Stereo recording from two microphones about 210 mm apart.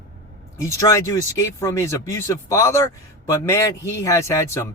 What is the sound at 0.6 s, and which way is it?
Speech, 15° left (ahead or behind).